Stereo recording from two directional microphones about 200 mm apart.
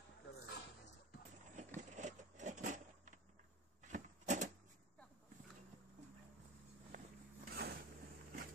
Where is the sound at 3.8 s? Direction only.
35° right (ahead or behind).